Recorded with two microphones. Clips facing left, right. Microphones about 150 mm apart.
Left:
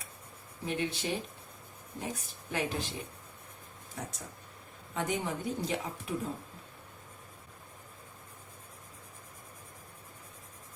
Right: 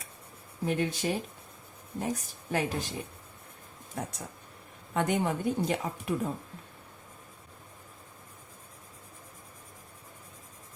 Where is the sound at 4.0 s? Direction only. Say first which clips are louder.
Right 5 dB; 55° right (ahead or behind).